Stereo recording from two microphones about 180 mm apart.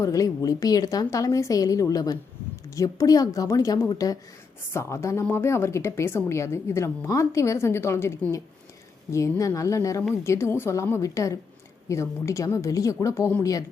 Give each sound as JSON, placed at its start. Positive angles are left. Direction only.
{"t": 0.0, "sound": "a woman's voice", "side_deg": 20}